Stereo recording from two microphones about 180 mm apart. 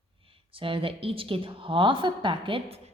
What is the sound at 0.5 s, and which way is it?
A woman's voice, 30° right (ahead or behind).